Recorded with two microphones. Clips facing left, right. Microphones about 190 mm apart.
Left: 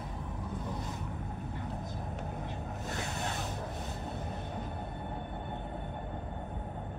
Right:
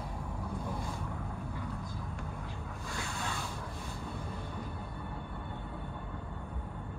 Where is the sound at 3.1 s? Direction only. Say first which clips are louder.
Left 2 dB; 20° left (ahead or behind).